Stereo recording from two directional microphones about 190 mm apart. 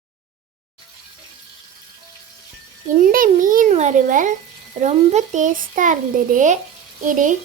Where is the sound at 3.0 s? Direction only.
45° right (ahead or behind).